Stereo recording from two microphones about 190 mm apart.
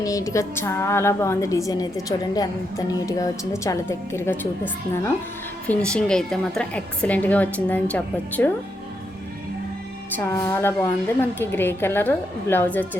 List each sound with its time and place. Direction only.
0.0 s a woman's voice: 15° left (ahead or behind)
5.6 s a woman's voice: 5° left (ahead or behind)
10.2 s a woman's voice: 15° left (ahead or behind)